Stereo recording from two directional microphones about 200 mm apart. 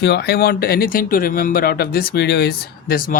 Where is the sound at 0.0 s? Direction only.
55° left (ahead or behind).